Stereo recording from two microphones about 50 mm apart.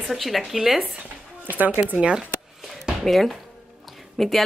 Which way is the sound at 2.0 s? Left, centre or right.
Centre.